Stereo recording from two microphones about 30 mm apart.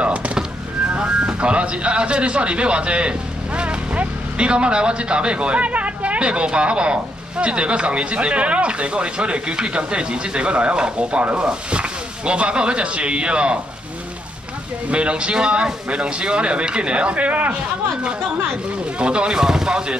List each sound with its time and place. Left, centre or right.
0.0 s music: right
1.2 s speech: right
6.2 s speech: right
14.9 s speech: right
18.9 s speech: right
19.4 s speech: right